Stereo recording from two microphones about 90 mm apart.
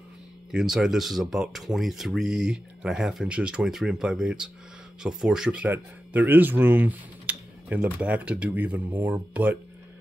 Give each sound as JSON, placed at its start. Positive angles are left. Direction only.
{"t": 0.5, "sound": "speech", "side_deg": -5}
{"t": 5.7, "sound": "speech", "side_deg": -20}